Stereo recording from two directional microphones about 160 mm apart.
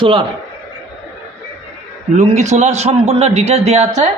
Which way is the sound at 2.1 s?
45° right (ahead or behind).